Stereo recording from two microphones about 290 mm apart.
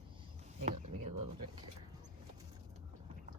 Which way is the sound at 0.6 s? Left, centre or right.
Right.